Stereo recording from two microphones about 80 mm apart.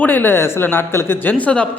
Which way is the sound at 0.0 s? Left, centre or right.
Left.